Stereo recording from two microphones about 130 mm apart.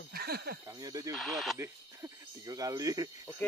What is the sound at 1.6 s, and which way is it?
Speech, 25° right (ahead or behind).